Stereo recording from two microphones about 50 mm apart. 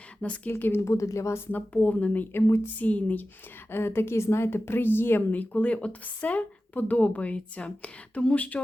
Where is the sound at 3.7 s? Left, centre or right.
Left.